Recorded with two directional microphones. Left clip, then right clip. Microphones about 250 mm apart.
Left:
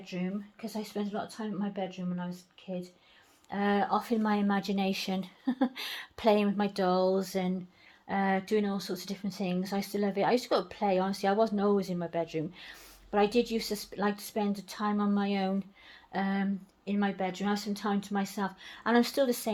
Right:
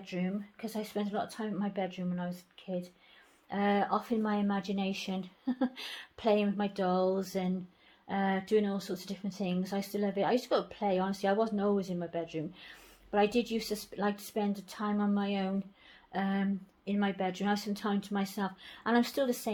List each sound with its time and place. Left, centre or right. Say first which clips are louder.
0.0 s speech: even; centre